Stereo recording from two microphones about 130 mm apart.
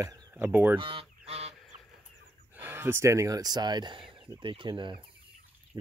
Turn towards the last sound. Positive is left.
turn(degrees=-40)  # may be behind; listen again after turning